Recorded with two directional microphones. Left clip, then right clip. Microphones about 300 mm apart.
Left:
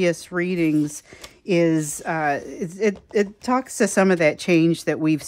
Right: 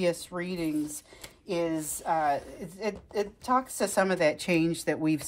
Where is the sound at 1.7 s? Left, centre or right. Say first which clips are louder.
Left 6 dB; left.